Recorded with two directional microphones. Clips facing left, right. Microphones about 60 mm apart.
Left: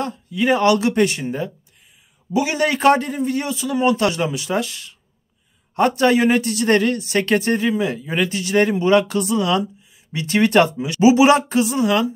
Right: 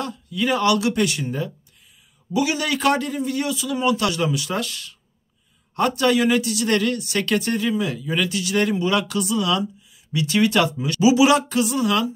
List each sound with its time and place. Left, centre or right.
0.0 s a man's voice: left